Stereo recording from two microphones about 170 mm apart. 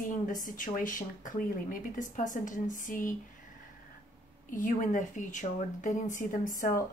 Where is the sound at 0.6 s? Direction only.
50° left (ahead or behind).